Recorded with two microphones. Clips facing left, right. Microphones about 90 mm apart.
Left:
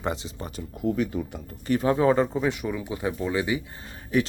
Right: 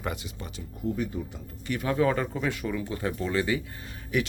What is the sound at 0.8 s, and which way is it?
Speech, 90° left.